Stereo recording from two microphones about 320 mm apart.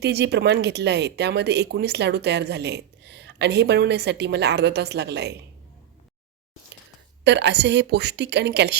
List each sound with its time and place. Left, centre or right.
0.0 s speech: right
7.3 s speech: right